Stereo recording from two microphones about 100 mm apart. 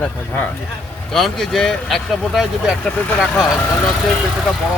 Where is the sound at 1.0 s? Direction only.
5° left (ahead or behind).